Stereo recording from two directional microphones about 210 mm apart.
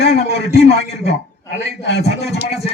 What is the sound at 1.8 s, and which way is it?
Speech, 55° left (ahead or behind).